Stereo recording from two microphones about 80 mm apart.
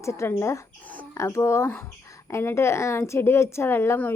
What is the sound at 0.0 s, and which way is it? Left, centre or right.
A woman's voice, left.